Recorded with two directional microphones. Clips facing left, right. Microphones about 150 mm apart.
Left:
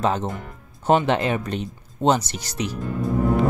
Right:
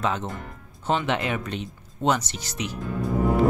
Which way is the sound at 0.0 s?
35° left (ahead or behind).